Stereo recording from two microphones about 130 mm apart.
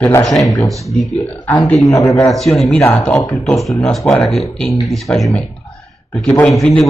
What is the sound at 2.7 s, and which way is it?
Speech, 15° left (ahead or behind).